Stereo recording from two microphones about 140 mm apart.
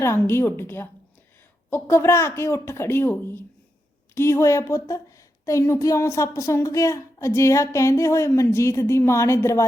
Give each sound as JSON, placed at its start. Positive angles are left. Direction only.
{"t": 0.0, "sound": "a woman's voice", "side_deg": 20}